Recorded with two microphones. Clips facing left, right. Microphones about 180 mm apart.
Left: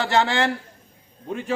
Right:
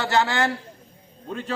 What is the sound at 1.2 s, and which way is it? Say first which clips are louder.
Speech: left 2 dB; 15° left (ahead or behind).